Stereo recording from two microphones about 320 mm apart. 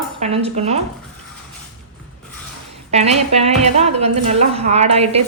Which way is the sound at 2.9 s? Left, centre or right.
Centre.